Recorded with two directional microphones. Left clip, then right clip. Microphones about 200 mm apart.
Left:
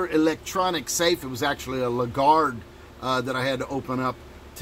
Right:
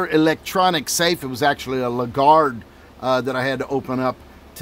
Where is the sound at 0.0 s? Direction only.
40° right (ahead or behind).